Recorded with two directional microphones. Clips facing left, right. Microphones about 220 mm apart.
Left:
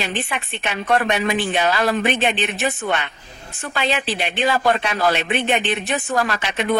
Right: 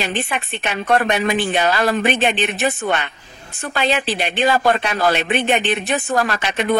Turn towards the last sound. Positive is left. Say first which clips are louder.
# right 2 dB
turn(degrees=-40)  # may be behind; listen again after turning